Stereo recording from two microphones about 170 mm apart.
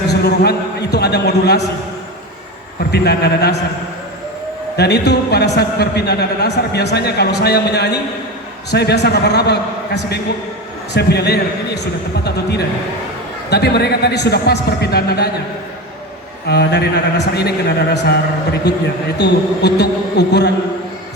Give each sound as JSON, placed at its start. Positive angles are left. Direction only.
{"t": 0.1, "sound": "a man's voice", "side_deg": 80}
{"t": 2.9, "sound": "speech", "side_deg": 75}
{"t": 4.8, "sound": "speech", "side_deg": 75}
{"t": 16.5, "sound": "speech", "side_deg": 75}